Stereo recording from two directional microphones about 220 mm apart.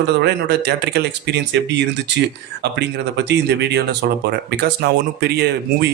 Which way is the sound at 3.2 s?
50° right (ahead or behind).